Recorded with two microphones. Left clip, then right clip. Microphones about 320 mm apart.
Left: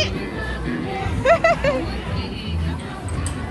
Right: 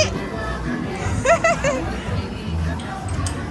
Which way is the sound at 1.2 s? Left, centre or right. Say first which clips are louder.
Left 1 dB; centre.